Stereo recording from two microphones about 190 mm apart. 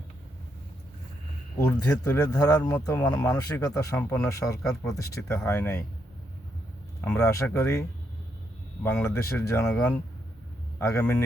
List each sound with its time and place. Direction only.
1.5 s speech: 20° left (ahead or behind)
4.6 s speech: 5° left (ahead or behind)
4.9 s speech: 15° left (ahead or behind)
7.0 s a man's voice: 10° left (ahead or behind)